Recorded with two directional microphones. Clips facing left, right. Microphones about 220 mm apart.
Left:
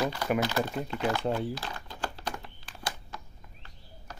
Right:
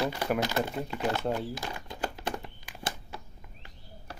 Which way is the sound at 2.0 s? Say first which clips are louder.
Right 3 dB; 15° right (ahead or behind).